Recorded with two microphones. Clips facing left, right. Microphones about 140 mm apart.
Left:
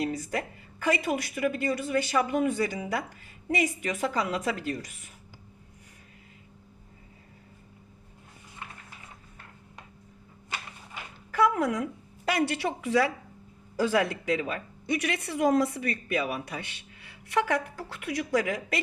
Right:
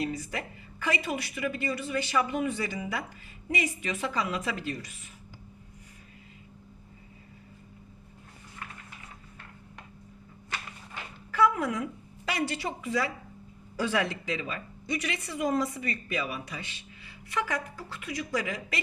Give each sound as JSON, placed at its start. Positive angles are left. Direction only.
{"t": 0.0, "sound": "a woman's voice", "side_deg": 45}
{"t": 11.3, "sound": "a woman's voice", "side_deg": 45}
{"t": 13.7, "sound": "speech", "side_deg": 45}